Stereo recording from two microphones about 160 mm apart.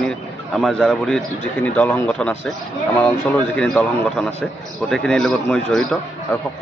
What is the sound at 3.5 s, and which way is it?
A man's voice, 5° left (ahead or behind).